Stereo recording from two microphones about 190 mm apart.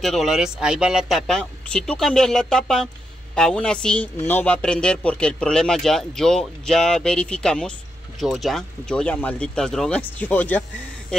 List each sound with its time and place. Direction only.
0.0 s speech: centre (ahead or behind)